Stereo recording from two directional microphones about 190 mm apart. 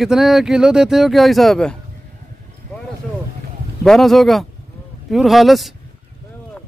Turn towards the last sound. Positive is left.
turn(degrees=0)  # may be behind; listen again after turning